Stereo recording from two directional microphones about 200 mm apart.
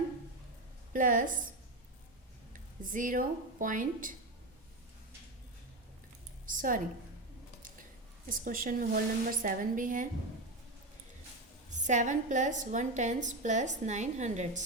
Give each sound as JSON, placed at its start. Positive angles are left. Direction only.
{"t": 0.9, "sound": "a woman's voice", "side_deg": -40}
{"t": 2.5, "sound": "speech", "side_deg": -40}
{"t": 6.4, "sound": "a woman's voice", "side_deg": -40}
{"t": 8.3, "sound": "a woman's voice", "side_deg": -45}
{"t": 11.7, "sound": "a woman's voice", "side_deg": -35}